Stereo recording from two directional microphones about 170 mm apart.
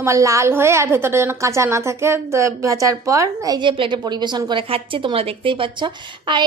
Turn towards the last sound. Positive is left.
turn(degrees=-30)  # may be behind; listen again after turning